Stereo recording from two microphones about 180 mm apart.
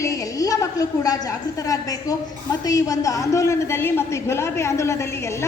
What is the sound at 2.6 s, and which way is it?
A woman's voice, 20° left (ahead or behind).